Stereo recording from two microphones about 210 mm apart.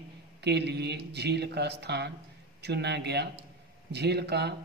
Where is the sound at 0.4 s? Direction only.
55° right (ahead or behind).